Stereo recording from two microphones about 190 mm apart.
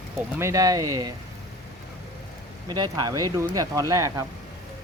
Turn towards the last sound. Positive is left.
turn(degrees=-15)  # may be behind; listen again after turning